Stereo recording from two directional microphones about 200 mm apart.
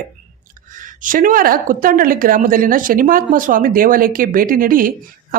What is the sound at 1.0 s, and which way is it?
Speech, 45° right (ahead or behind).